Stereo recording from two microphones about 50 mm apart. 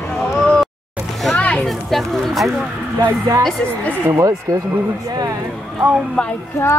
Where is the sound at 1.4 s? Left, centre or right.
Left.